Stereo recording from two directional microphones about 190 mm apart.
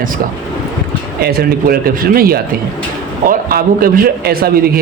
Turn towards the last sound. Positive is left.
turn(degrees=-50)  # may be behind; listen again after turning